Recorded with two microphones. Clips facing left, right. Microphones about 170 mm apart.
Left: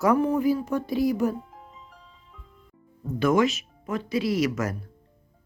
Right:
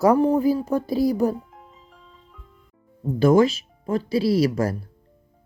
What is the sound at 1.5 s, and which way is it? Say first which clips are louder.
Music: left 1 dB; centre (ahead or behind).